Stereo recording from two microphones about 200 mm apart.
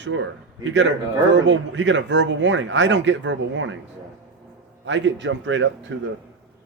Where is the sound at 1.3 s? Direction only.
65° right (ahead or behind).